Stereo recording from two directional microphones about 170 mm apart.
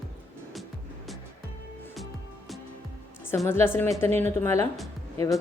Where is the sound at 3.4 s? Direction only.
15° left (ahead or behind).